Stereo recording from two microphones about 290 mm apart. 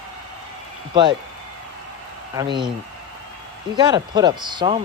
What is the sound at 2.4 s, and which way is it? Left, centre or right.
Speech, centre.